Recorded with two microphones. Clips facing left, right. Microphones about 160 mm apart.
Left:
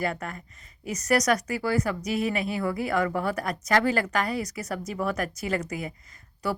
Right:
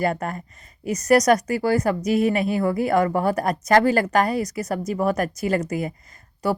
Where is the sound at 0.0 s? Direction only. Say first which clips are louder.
Right 6 dB; 45° right (ahead or behind).